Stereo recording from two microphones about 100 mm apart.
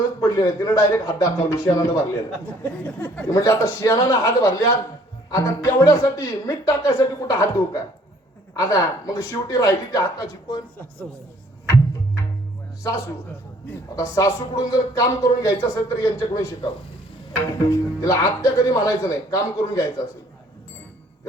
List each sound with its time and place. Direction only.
0.2 s speech: 35° left (ahead or behind)
2.8 s speech: 20° left (ahead or behind)
3.2 s speech: 35° left (ahead or behind)
13.9 s speech: 35° left (ahead or behind)